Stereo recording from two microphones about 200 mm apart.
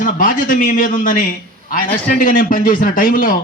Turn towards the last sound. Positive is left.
turn(degrees=45)  # may be behind; listen again after turning